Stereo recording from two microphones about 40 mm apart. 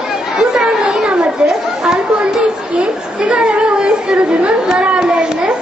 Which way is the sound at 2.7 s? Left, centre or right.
Right.